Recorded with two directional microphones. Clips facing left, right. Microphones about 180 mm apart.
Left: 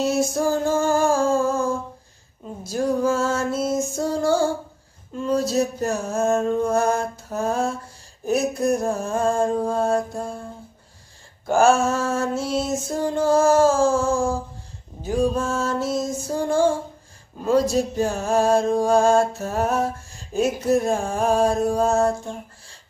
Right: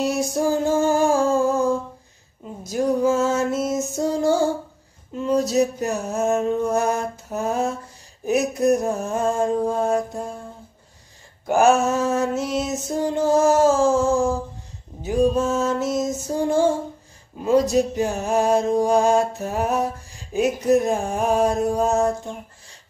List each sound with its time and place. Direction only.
0.4 s music: 20° right (ahead or behind)
11.4 s music: 20° right (ahead or behind)